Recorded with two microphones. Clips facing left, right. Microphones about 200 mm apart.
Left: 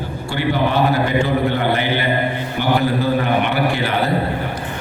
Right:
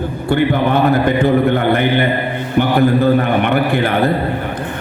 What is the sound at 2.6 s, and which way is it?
A man's voice, 55° right (ahead or behind).